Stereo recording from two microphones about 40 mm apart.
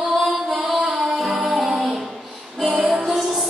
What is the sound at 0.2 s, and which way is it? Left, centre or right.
Music, centre.